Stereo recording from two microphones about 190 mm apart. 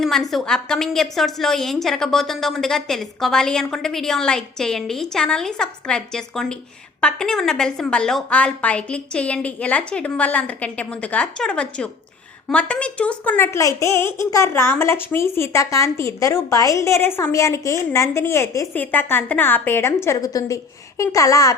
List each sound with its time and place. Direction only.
0.0 s a woman's voice: centre (ahead or behind); by 21.5 s 15° left (ahead or behind)